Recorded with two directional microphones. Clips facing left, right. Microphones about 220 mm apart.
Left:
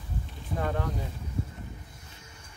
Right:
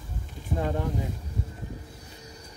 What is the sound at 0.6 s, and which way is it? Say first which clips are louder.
Speech: right 2 dB; 20° right (ahead or behind).